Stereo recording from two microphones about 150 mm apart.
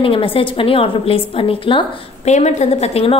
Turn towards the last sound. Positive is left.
turn(degrees=45)  # may be behind; listen again after turning